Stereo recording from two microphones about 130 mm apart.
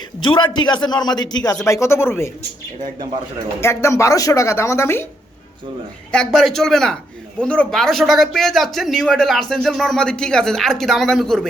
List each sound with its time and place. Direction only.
0.2 s a man's voice: 40° left (ahead or behind); by 2.3 s 20° left (ahead or behind)
3.6 s a woman's voice: 20° left (ahead or behind)
6.1 s speech: 5° left (ahead or behind)